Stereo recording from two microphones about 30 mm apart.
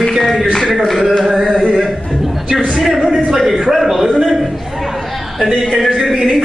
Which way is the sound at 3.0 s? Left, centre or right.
Centre.